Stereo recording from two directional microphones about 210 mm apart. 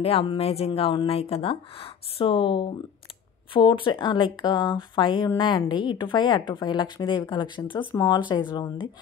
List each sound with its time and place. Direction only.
0.0 s speech: 25° left (ahead or behind)